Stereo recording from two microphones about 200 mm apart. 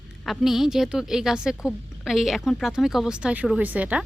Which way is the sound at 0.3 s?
Centre (ahead or behind).